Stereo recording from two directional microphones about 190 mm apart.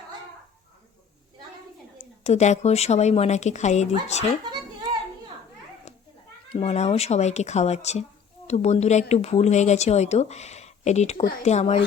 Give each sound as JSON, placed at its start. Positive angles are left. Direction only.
{"t": 2.0, "sound": "speech", "side_deg": 35}
{"t": 5.9, "sound": "a sound", "side_deg": 35}
{"t": 6.5, "sound": "speech", "side_deg": 35}